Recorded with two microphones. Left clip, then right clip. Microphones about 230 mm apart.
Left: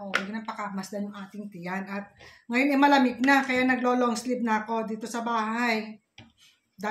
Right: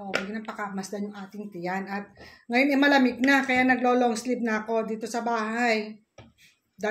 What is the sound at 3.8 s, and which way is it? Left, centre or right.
Speech, left.